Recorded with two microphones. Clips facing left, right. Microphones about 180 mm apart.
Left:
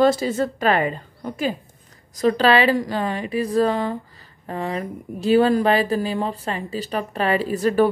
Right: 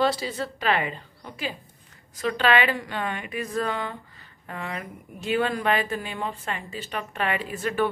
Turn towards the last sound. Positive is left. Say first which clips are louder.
# left 8 dB
turn(degrees=40)  # may be behind; listen again after turning